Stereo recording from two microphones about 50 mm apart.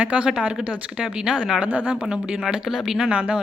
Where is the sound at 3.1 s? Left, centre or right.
Right.